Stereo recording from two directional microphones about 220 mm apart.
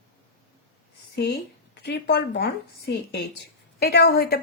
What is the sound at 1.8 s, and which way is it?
Speech, 50° left (ahead or behind).